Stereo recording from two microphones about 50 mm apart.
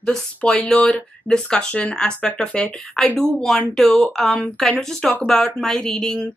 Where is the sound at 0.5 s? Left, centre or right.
Centre.